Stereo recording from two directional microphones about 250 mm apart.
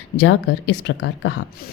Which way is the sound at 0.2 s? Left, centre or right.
Left.